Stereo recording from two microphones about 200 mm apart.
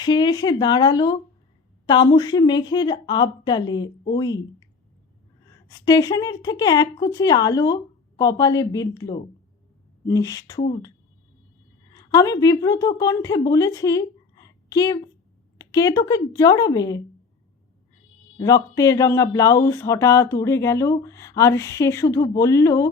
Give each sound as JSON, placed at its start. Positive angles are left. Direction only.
{"t": 0.0, "sound": "speech", "side_deg": 20}
{"t": 5.6, "sound": "speech", "side_deg": 20}
{"t": 11.9, "sound": "a woman's voice", "side_deg": 15}
{"t": 18.3, "sound": "speech", "side_deg": 15}